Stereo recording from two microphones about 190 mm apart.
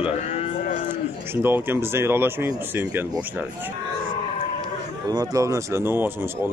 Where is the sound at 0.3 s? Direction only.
35° left (ahead or behind).